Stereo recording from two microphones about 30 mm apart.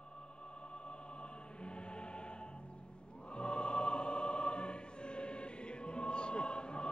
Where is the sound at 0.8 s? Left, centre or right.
Left.